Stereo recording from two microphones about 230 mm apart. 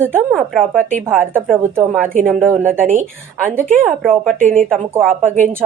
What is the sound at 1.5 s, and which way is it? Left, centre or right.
Speech, centre.